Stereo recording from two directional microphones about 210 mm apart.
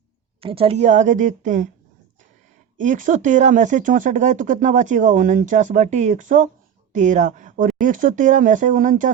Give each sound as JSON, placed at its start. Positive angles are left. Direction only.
{"t": 0.4, "sound": "speech", "side_deg": -25}
{"t": 2.7, "sound": "speech", "side_deg": -40}